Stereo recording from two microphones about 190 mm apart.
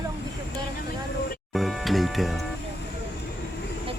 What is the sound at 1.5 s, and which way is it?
Music, centre (ahead or behind).